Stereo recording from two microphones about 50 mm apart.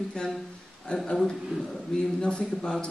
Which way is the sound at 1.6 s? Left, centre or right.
Centre.